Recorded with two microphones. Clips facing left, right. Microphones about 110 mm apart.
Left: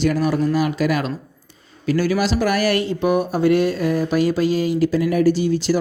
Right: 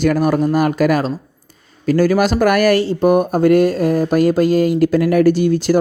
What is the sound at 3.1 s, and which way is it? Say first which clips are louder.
Speech: right 4 dB; 50° right (ahead or behind).